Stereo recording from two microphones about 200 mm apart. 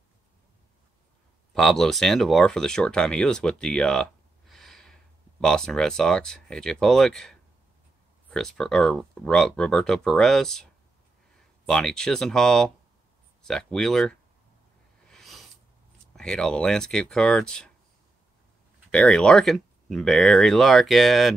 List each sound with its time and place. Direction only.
1.5 s speech: centre (ahead or behind)
15.0 s a sound: centre (ahead or behind)
16.2 s speech: 5° left (ahead or behind)
18.9 s speech: 5° left (ahead or behind)